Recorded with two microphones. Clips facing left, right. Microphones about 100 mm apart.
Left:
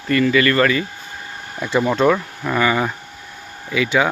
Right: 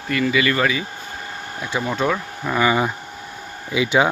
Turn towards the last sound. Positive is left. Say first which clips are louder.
# even
turn(degrees=-20)  # may be behind; listen again after turning